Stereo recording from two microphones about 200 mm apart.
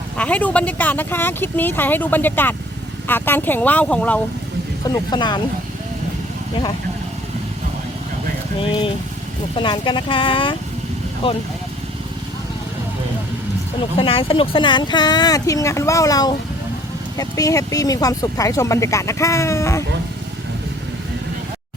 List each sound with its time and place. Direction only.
0.2 s speech: 5° left (ahead or behind)
4.9 s speech: 20° left (ahead or behind)
8.6 s speech: 25° left (ahead or behind)
14.0 s speech: 25° left (ahead or behind)